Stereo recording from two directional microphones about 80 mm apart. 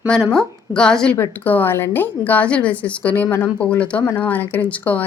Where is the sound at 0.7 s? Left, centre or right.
Centre.